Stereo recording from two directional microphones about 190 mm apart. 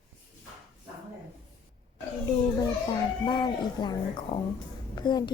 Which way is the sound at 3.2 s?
25° left (ahead or behind).